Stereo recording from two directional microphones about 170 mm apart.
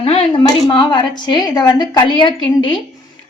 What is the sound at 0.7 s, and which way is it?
A woman's voice, 25° left (ahead or behind).